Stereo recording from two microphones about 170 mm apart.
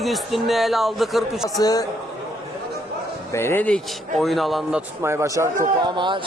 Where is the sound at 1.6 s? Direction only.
20° left (ahead or behind).